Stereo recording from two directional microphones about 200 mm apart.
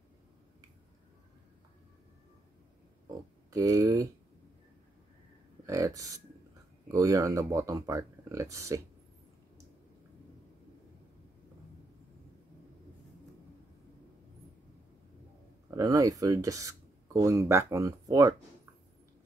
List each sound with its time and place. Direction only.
3.5 s speech: 15° right (ahead or behind)
5.7 s speech: 15° right (ahead or behind)
15.7 s speech: 15° right (ahead or behind)